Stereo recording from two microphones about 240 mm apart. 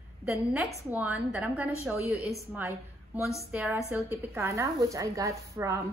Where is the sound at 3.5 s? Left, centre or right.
Centre.